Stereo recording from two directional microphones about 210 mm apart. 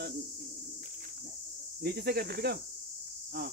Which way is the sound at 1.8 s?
50° right (ahead or behind).